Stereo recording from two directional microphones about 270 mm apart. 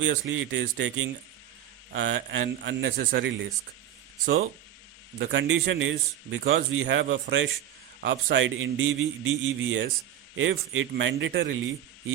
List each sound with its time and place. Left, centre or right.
0.0 s a man's voice: right
5.2 s a man's voice: right